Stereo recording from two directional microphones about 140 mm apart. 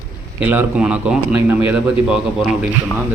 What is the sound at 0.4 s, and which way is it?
A man's voice, 10° right (ahead or behind).